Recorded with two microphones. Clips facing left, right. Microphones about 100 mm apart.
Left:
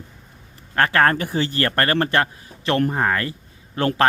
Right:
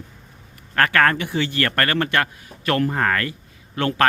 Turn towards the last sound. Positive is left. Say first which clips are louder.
# left 1 dB
turn(degrees=30)  # may be behind; listen again after turning